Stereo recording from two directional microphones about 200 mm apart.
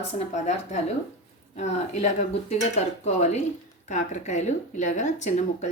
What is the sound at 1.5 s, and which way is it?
Speech, 35° left (ahead or behind).